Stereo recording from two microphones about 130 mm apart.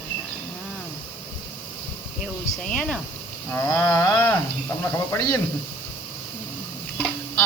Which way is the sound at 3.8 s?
20° left (ahead or behind).